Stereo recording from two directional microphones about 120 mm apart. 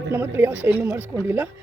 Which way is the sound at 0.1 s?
20° right (ahead or behind).